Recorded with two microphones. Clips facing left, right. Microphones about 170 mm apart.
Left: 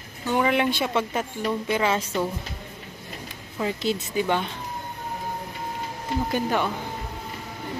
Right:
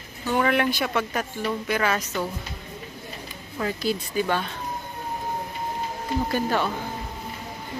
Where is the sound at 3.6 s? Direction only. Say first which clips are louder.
Left 1 dB; 25° left (ahead or behind).